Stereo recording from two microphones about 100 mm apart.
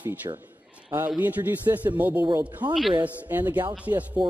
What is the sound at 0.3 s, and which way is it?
Speech, 45° right (ahead or behind).